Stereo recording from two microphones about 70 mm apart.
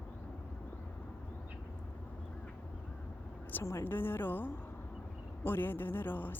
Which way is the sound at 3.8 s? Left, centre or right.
Left.